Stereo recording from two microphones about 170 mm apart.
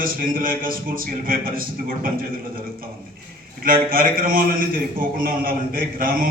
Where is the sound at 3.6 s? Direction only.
60° right (ahead or behind).